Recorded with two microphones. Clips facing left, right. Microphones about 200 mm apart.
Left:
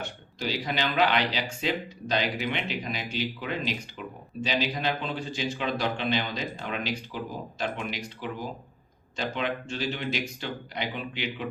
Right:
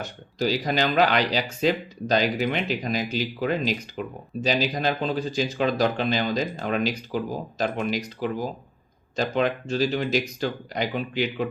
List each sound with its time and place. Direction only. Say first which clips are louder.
0.0 s speech: right 7 dB; 40° right (ahead or behind)
9.1 s speech: right 7 dB; 40° right (ahead or behind)